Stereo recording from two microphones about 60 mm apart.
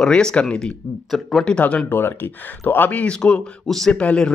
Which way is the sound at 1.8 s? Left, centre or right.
Left.